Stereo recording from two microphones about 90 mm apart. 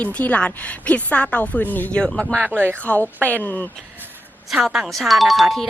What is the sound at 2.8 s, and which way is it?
Speech, 15° left (ahead or behind).